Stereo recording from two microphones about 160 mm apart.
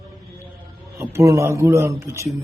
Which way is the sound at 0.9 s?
20° right (ahead or behind).